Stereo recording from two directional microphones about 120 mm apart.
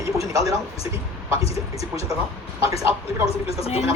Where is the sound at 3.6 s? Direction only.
55° left (ahead or behind).